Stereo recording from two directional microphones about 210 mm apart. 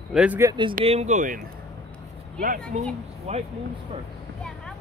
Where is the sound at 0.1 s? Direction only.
5° right (ahead or behind).